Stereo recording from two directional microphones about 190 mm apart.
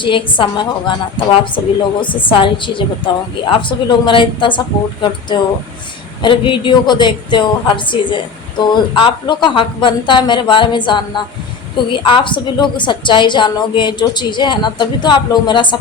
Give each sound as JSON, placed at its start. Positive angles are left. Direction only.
{"t": 0.0, "sound": "a woman's voice", "side_deg": 25}